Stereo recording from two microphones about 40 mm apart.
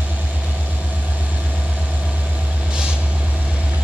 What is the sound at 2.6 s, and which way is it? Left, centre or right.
Vehicle, right.